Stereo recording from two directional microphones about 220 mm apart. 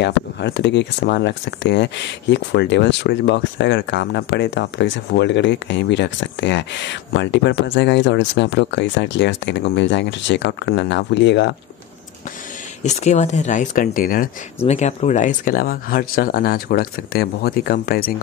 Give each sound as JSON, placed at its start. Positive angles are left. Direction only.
{"t": 0.0, "sound": "speech", "side_deg": 50}
{"t": 12.8, "sound": "speech", "side_deg": 30}
{"t": 14.7, "sound": "speech", "side_deg": 30}